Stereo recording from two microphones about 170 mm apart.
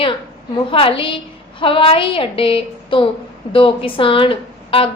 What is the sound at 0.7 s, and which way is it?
A woman's voice, 30° left (ahead or behind).